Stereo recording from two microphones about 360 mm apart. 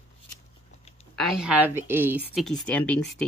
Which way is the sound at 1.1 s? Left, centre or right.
Centre.